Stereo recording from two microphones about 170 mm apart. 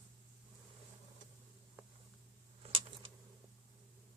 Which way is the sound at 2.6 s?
30° right (ahead or behind).